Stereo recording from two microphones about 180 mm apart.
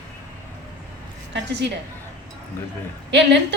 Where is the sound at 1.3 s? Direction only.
75° right (ahead or behind).